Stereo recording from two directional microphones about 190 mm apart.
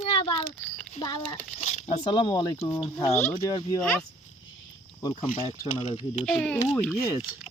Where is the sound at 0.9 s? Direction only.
25° left (ahead or behind).